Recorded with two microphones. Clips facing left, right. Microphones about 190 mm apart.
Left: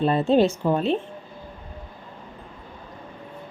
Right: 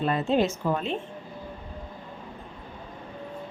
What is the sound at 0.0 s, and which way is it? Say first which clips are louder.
Speech: left 5 dB; 30° left (ahead or behind).